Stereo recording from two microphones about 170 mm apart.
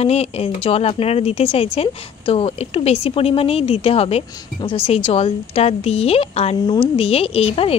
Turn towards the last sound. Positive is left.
turn(degrees=35)  # may be behind; listen again after turning